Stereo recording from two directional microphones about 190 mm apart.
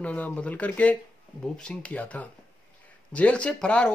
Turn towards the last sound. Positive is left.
turn(degrees=5)  # may be behind; listen again after turning